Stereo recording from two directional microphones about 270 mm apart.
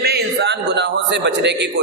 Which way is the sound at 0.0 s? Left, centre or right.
Right.